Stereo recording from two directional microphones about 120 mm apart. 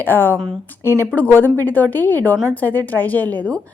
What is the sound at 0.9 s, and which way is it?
Speech, 20° right (ahead or behind).